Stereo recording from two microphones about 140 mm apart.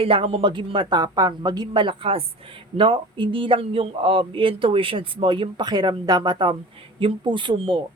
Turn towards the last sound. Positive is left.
turn(degrees=-35)  # may be behind; listen again after turning